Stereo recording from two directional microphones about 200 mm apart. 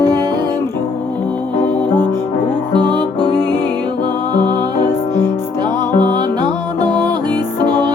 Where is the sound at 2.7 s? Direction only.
20° right (ahead or behind).